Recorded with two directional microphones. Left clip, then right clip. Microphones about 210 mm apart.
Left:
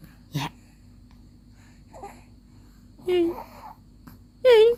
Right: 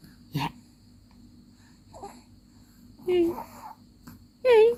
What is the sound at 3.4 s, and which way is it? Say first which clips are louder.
Wail: even; 10° left (ahead or behind).